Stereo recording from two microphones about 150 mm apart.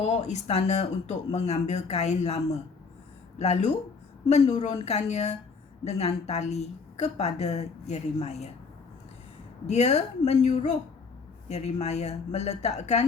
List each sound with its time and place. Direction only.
0.0 s a woman's voice: 50° left (ahead or behind)
9.6 s a woman's voice: 50° left (ahead or behind)